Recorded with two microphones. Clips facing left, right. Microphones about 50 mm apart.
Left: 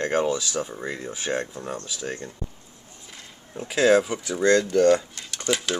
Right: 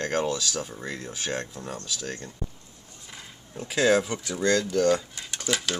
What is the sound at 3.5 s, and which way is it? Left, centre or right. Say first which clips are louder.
Speech: left 3 dB; centre.